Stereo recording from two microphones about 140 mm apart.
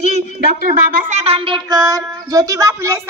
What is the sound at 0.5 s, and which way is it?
Child singing, 65° right (ahead or behind).